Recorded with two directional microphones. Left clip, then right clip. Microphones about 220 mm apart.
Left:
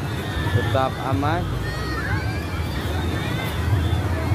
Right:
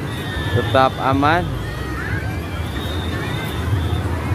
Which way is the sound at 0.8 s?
15° right (ahead or behind).